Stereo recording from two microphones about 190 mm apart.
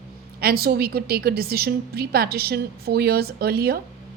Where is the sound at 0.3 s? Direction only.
55° right (ahead or behind).